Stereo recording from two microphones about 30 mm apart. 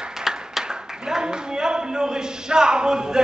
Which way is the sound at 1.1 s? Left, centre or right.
Right.